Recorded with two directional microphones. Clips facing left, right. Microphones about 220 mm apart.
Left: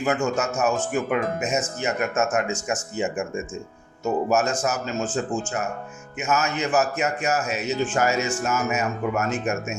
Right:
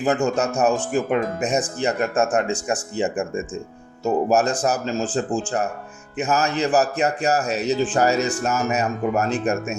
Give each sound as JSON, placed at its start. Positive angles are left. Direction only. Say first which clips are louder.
{"t": 0.0, "sound": "speech", "louder": "right 3 dB", "side_deg": -35}